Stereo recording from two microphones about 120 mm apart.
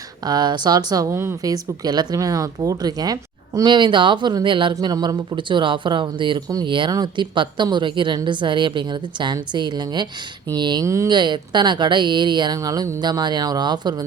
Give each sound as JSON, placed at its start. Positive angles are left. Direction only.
{"t": 0.3, "sound": "speech", "side_deg": -35}
{"t": 1.1, "sound": "speech", "side_deg": -20}
{"t": 10.8, "sound": "speech", "side_deg": -25}
{"t": 11.1, "sound": "speech", "side_deg": -40}